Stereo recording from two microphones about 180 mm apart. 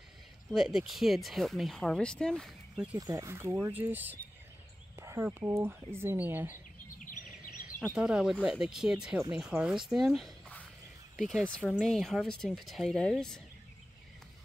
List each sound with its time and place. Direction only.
0.5 s speech: centre (ahead or behind)
3.0 s speech: 20° right (ahead or behind)
7.1 s bird vocalization: 50° left (ahead or behind)
7.8 s speech: 5° right (ahead or behind)
11.7 s speech: centre (ahead or behind)